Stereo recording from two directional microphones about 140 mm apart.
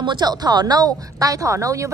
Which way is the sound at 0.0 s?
30° right (ahead or behind).